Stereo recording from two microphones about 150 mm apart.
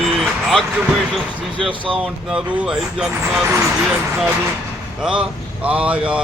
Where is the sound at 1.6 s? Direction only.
35° right (ahead or behind).